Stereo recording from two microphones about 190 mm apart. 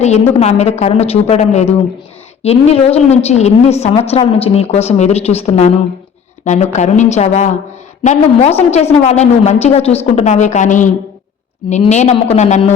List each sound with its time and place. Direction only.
0.3 s a woman's voice: 35° left (ahead or behind)